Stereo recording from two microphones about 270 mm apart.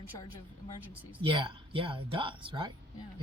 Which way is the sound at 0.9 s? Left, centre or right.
Centre.